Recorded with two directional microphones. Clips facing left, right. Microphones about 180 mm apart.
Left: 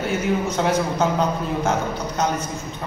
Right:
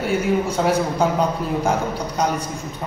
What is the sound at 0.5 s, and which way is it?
A man's voice, 10° right (ahead or behind).